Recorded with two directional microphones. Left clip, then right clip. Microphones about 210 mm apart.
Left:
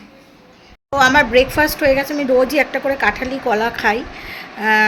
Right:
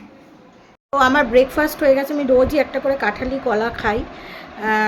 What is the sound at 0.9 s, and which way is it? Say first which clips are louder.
Speech: left 3 dB; 10° right (ahead or behind).